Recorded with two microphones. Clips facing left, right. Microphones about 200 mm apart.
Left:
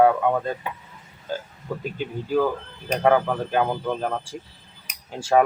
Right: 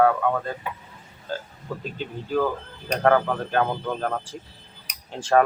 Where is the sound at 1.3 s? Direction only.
15° left (ahead or behind).